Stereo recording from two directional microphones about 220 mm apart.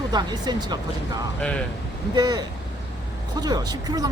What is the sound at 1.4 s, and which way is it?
Speech, 5° left (ahead or behind).